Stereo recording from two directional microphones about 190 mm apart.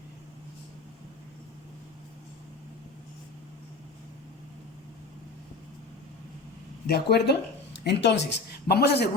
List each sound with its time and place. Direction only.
6.8 s a woman's voice: 55° left (ahead or behind)